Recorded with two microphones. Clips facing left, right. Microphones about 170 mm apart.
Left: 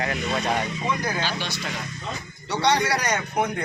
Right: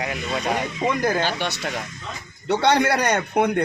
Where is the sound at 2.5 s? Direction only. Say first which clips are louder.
Right 4 dB; 55° right (ahead or behind).